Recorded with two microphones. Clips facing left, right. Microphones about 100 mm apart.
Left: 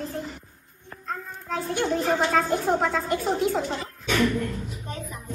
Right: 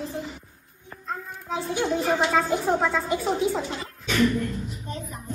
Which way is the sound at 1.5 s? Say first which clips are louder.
Even; centre (ahead or behind).